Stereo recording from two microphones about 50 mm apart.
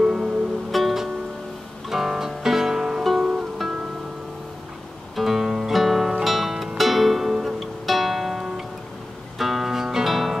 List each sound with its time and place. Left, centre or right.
0.0 s music: centre
0.7 s music: centre
3.0 s music: centre
5.1 s music: centre